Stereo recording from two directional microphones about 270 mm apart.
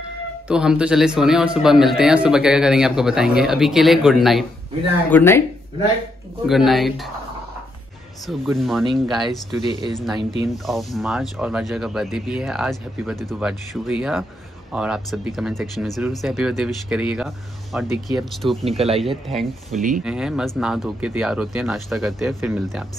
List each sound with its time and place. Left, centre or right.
0.5 s speech: centre
6.4 s speech: centre
8.3 s speech: centre
9.2 s speech: centre
10.7 s speech: centre
18.7 s speech: right
18.9 s speech: centre
19.7 s speech: right
20.0 s speech: centre